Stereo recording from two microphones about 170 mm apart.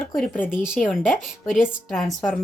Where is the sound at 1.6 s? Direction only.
Centre (ahead or behind).